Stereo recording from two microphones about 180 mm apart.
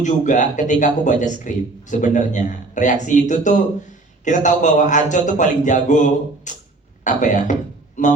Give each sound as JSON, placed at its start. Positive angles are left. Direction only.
{"t": 0.0, "sound": "a man's voice", "side_deg": 45}